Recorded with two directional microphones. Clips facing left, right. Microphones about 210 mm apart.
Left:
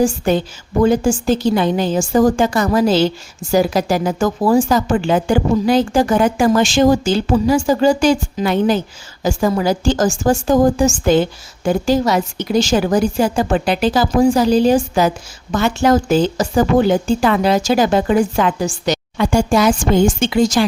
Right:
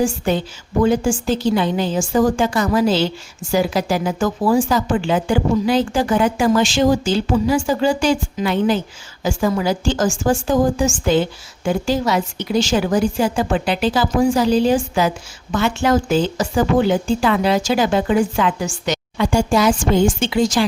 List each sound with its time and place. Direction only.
0.8 s a woman's voice: 40° left (ahead or behind)